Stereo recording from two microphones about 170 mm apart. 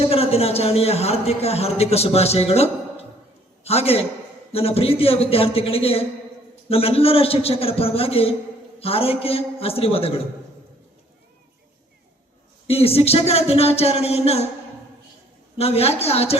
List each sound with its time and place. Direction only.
0.0 s a man's voice: 35° left (ahead or behind)
12.6 s a man's voice: 35° left (ahead or behind)
15.5 s a man's voice: 35° left (ahead or behind)